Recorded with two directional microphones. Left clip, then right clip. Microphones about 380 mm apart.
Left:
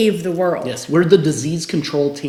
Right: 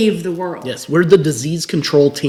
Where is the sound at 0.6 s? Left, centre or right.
Right.